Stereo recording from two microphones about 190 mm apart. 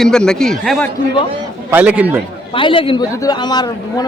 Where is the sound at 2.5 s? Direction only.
25° left (ahead or behind).